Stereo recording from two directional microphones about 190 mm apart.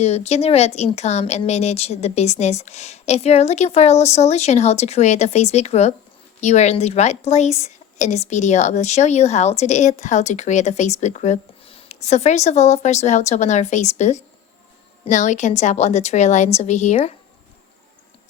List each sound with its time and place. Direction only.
0.0 s a woman's voice: 35° left (ahead or behind)